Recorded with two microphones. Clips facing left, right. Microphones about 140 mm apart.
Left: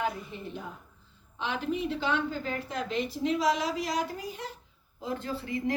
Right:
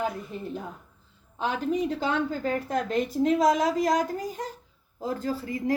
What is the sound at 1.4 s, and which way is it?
A woman's voice, 40° right (ahead or behind).